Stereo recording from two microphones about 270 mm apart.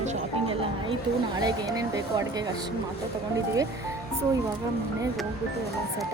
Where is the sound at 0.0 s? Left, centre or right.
Centre.